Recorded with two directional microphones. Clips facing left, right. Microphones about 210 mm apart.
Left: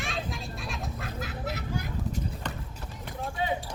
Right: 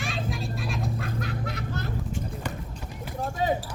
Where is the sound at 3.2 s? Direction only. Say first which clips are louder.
Right 4 dB; 40° right (ahead or behind).